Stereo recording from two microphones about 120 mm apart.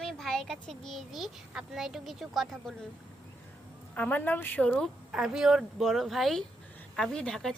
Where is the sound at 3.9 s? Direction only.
15° left (ahead or behind).